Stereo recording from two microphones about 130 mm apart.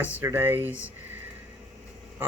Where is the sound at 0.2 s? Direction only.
20° right (ahead or behind).